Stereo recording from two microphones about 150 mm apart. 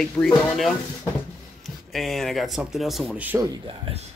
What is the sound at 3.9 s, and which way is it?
Speech, 35° right (ahead or behind).